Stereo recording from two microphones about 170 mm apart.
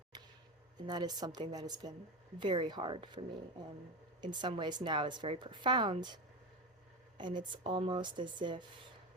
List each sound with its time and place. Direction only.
0.9 s a woman's voice: 25° right (ahead or behind)
7.2 s a woman's voice: 25° right (ahead or behind)